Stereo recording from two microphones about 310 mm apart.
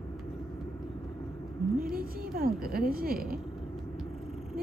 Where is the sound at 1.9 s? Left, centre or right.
Right.